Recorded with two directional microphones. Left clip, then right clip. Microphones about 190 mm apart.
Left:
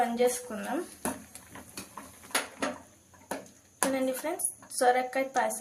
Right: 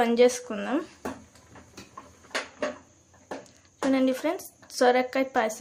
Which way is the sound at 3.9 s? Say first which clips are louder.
Right 5 dB; 50° right (ahead or behind).